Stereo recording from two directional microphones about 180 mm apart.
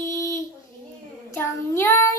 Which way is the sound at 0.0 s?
15° left (ahead or behind).